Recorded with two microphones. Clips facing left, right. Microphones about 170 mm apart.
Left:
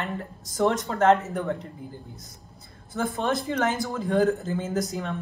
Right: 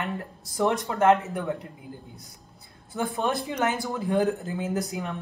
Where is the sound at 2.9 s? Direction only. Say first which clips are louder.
Left 1 dB; 5° right (ahead or behind).